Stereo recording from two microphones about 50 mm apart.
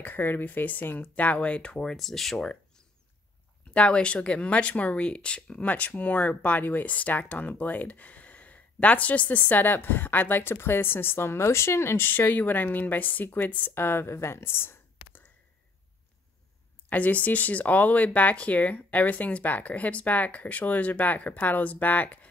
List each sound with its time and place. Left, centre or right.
0.0 s speech: left
1.8 s speech: centre
3.7 s speech: left
5.6 s speech: left
12.1 s speech: left
13.7 s speech: left
16.9 s speech: left